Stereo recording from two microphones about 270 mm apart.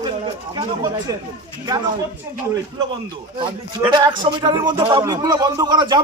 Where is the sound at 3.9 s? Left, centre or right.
Centre.